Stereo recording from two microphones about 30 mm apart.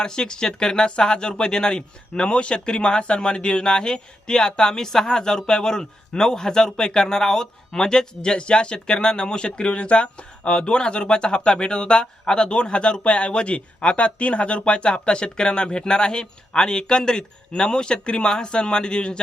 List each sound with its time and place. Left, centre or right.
0.0 s speech: left